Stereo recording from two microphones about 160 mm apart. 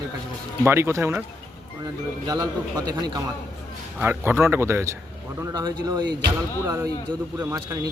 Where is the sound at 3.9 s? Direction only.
15° right (ahead or behind).